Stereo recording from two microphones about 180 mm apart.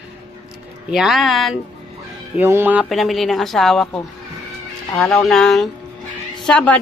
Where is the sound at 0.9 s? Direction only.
Centre (ahead or behind).